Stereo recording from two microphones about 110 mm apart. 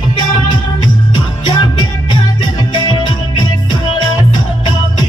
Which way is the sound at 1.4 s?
45° left (ahead or behind).